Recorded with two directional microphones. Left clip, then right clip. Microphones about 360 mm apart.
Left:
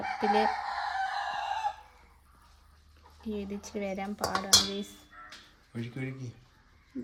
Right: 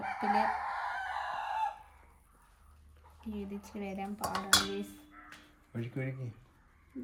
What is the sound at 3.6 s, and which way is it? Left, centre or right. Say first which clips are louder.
Speech: left 5 dB; centre.